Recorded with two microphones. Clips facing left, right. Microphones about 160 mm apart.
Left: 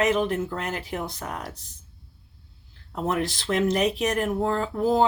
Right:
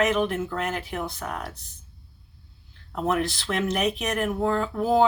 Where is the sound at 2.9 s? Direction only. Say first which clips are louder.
Right 1 dB; 30° left (ahead or behind).